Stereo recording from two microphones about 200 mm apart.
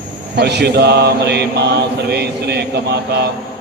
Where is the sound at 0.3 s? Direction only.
55° right (ahead or behind).